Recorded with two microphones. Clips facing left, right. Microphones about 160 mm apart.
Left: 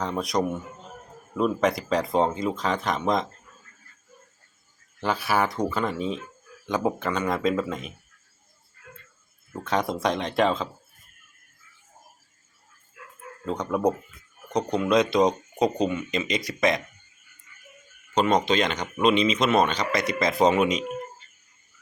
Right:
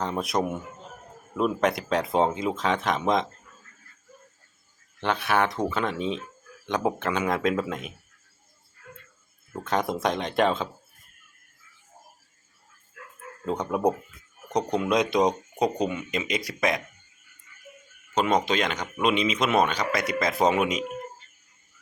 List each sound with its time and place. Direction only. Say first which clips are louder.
0.0 s speech: left 1 dB; centre (ahead or behind)
4.9 s speech: even; 5° left (ahead or behind)
9.5 s speech: even; 5° right (ahead or behind)
13.4 s speech: even; 5° right (ahead or behind)
18.1 s speech: left 2 dB; 5° right (ahead or behind)